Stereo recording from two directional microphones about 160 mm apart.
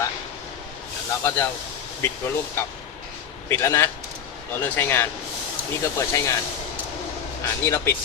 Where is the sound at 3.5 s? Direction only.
15° left (ahead or behind).